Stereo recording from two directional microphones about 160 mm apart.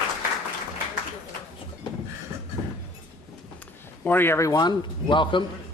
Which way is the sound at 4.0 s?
15° left (ahead or behind).